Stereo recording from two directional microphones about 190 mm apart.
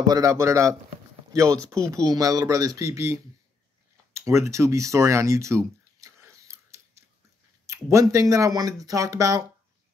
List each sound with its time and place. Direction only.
0.0 s speech: 20° right (ahead or behind)
4.1 s a sound: 15° right (ahead or behind)
7.6 s speech: 15° right (ahead or behind)